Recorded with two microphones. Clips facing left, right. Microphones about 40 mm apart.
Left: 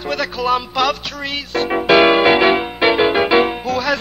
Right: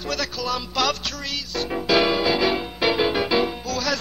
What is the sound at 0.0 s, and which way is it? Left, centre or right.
Speech, left.